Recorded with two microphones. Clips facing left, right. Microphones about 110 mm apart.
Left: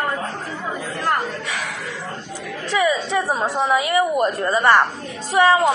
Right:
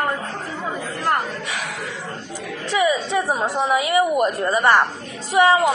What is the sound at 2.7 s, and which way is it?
A woman's voice, 20° right (ahead or behind).